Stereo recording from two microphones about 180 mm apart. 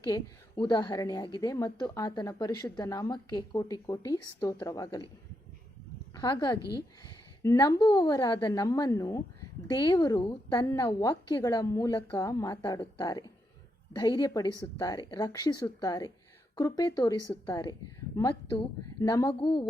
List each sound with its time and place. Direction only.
0.1 s a woman's voice: 20° left (ahead or behind)
6.1 s a woman's voice: 20° left (ahead or behind)